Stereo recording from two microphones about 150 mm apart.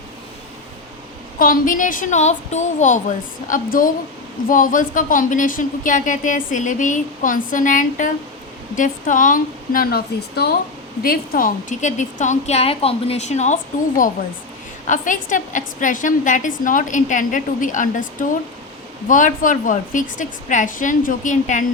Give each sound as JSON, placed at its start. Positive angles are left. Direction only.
{"t": 1.4, "sound": "a woman's voice", "side_deg": 65}
{"t": 11.0, "sound": "a woman's voice", "side_deg": 80}